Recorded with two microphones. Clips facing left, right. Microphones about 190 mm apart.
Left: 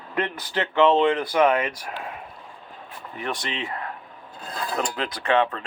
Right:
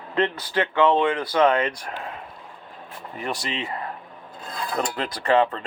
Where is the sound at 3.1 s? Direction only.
Centre (ahead or behind).